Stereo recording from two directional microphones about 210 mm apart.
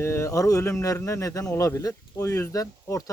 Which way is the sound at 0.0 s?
15° left (ahead or behind).